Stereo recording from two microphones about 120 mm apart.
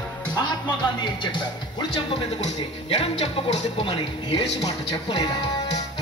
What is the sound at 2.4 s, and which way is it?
Speech, 60° left (ahead or behind).